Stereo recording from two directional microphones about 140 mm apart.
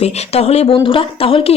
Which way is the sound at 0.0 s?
45° left (ahead or behind).